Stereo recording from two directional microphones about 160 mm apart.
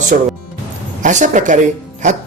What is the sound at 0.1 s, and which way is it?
A man's voice, 55° right (ahead or behind).